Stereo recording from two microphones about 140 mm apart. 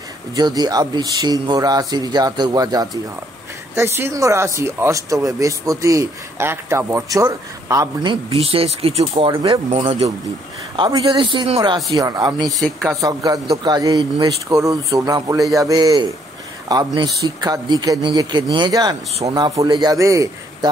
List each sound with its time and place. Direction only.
0.4 s speech: 30° right (ahead or behind)
8.3 s speech: 45° right (ahead or behind)
9.1 s speech: 35° right (ahead or behind)